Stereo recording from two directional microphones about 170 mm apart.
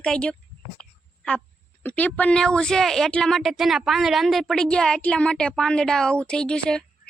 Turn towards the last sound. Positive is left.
turn(degrees=5)  # may be behind; listen again after turning